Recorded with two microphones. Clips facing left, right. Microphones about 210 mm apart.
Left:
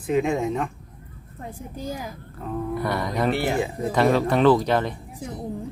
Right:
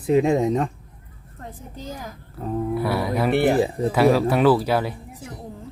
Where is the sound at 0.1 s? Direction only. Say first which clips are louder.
Right 4 dB; 35° right (ahead or behind).